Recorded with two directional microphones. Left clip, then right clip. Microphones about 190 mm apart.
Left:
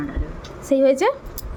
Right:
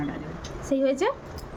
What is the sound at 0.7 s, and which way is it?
Speech, 30° left (ahead or behind).